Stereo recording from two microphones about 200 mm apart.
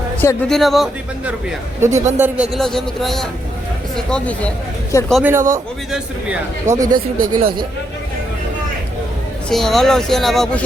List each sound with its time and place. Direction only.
0.4 s a man's voice: centre (ahead or behind)
5.1 s a man's voice: 10° right (ahead or behind)
6.7 s speech: 40° right (ahead or behind)
9.5 s a man's voice: centre (ahead or behind)